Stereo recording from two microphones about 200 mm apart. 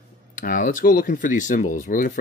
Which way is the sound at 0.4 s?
40° left (ahead or behind).